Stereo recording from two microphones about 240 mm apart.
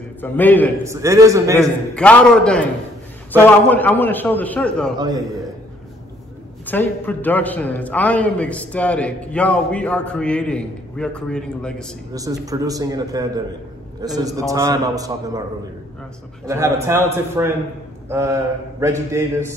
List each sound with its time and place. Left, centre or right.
0.2 s a man's voice: centre
0.8 s a man's voice: centre
2.0 s a man's voice: centre
4.9 s a man's voice: centre
6.6 s a man's voice: centre
12.1 s a man's voice: centre
16.4 s a man's voice: centre